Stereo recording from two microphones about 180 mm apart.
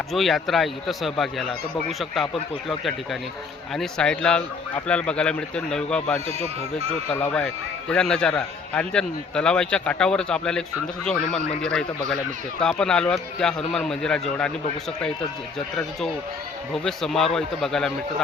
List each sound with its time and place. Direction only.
0.1 s a man's voice: centre (ahead or behind)
6.2 s speech: 35° right (ahead or behind)
7.1 s a man's voice: 10° left (ahead or behind)
16.8 s a man's voice: centre (ahead or behind)